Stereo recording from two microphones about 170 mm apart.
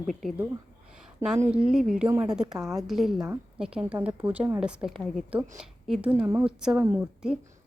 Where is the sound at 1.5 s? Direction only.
5° right (ahead or behind).